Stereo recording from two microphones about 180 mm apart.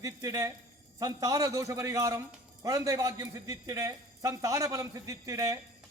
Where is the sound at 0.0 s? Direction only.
20° right (ahead or behind).